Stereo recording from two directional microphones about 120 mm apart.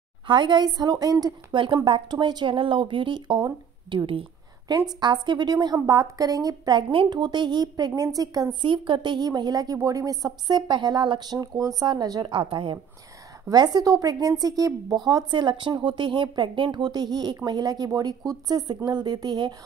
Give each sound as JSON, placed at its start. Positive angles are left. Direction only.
{"t": 0.3, "sound": "a woman's voice", "side_deg": -40}
{"t": 4.0, "sound": "speech", "side_deg": -50}
{"t": 4.7, "sound": "a woman's voice", "side_deg": -35}